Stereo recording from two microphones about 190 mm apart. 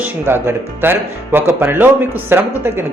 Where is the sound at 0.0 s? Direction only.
10° right (ahead or behind).